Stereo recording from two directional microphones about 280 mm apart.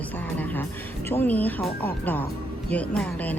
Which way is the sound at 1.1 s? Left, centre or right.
Centre.